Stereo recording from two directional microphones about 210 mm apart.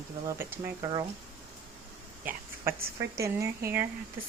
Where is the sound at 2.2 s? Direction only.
45° right (ahead or behind).